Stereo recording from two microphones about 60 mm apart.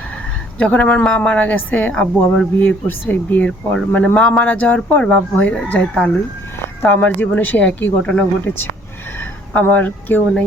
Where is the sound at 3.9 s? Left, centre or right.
Centre.